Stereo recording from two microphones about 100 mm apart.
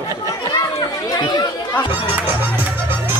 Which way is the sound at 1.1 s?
45° left (ahead or behind).